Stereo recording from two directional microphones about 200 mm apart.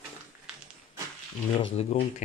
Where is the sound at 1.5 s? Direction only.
30° left (ahead or behind).